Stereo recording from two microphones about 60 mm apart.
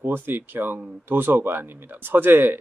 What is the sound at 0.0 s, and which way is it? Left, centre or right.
Speech, right.